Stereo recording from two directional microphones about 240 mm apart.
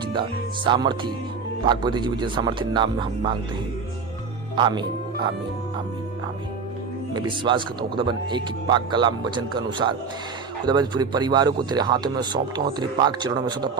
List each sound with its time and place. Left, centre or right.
0.1 s speech: centre
4.5 s speech: centre
7.1 s speech: centre